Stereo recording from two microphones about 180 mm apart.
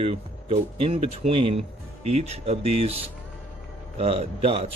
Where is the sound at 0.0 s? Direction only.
35° right (ahead or behind).